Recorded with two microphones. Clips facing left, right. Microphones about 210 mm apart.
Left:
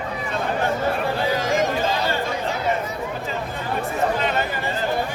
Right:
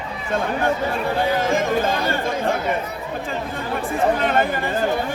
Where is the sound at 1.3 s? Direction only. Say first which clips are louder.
Right 1 dB; 55° right (ahead or behind).